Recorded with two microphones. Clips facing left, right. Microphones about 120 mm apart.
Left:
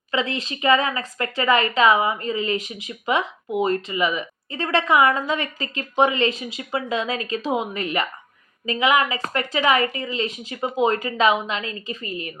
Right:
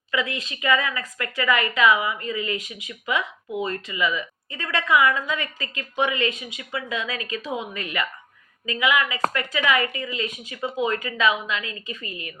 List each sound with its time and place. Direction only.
0.1 s a woman's voice: 30° left (ahead or behind)